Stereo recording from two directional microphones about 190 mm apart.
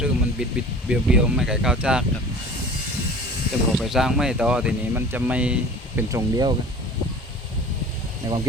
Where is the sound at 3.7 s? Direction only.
Centre (ahead or behind).